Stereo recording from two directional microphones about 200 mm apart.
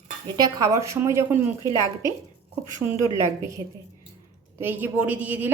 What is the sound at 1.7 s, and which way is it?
Speech, 20° left (ahead or behind).